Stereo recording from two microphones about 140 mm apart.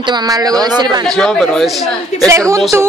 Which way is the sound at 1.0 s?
5° left (ahead or behind).